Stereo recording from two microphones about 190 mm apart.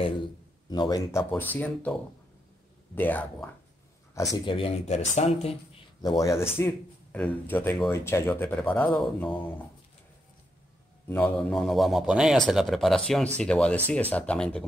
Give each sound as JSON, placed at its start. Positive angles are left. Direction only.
{"t": 0.7, "sound": "speech", "side_deg": 20}
{"t": 1.3, "sound": "speech", "side_deg": 10}
{"t": 3.0, "sound": "speech", "side_deg": 10}
{"t": 4.6, "sound": "speech", "side_deg": 30}
{"t": 5.9, "sound": "speech", "side_deg": 20}
{"t": 11.1, "sound": "speech", "side_deg": 10}